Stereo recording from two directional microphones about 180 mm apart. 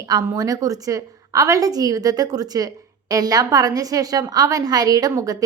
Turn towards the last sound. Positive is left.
turn(degrees=-20)  # may be behind; listen again after turning